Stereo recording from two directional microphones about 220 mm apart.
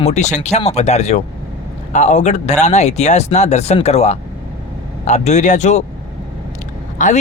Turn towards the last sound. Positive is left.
turn(degrees=35)  # may be behind; listen again after turning